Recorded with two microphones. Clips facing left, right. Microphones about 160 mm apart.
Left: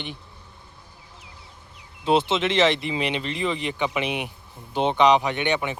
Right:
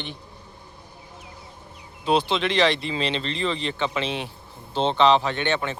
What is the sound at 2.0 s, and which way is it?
Speech, 20° left (ahead or behind).